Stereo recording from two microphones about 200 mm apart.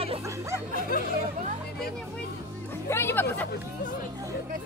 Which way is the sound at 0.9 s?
45° left (ahead or behind).